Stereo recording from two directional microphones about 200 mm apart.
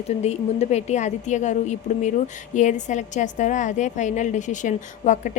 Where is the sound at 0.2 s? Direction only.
35° left (ahead or behind).